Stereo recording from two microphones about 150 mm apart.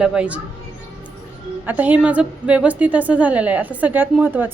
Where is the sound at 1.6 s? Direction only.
10° right (ahead or behind).